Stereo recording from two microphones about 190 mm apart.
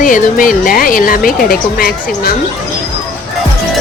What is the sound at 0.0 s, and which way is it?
Speech, 45° left (ahead or behind).